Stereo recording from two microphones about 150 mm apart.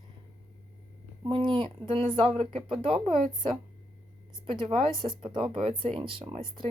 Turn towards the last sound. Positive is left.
turn(degrees=-35)  # may be behind; listen again after turning